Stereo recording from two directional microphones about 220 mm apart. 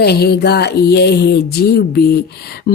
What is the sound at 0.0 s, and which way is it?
Speech, 45° left (ahead or behind).